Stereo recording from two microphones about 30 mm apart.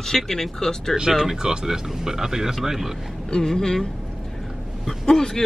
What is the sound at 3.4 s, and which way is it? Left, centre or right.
Speech, centre.